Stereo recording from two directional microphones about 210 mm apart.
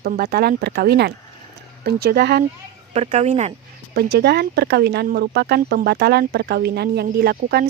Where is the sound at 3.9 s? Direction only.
50° right (ahead or behind).